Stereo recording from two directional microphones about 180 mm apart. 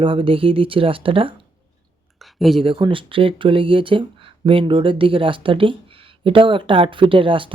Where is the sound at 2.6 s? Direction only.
30° right (ahead or behind).